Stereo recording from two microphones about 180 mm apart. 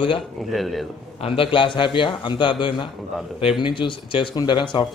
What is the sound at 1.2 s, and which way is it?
A man's voice, 30° left (ahead or behind).